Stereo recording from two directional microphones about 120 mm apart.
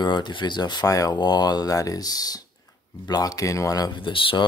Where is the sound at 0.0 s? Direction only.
40° left (ahead or behind).